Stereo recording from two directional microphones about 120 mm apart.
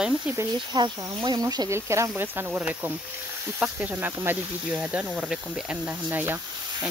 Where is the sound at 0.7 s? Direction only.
35° right (ahead or behind).